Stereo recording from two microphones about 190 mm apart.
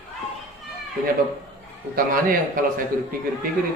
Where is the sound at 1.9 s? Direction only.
50° right (ahead or behind).